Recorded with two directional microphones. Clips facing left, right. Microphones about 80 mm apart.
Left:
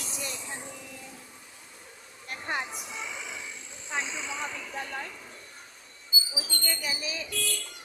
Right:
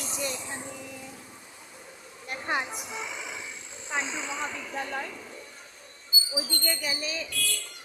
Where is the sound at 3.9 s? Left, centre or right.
Centre.